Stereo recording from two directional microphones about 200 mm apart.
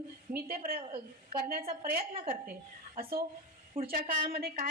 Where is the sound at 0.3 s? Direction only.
50° right (ahead or behind).